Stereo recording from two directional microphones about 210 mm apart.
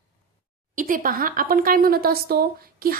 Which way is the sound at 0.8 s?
40° right (ahead or behind).